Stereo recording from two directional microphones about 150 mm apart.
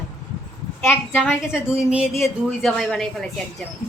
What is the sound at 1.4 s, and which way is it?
Speech, 5° right (ahead or behind).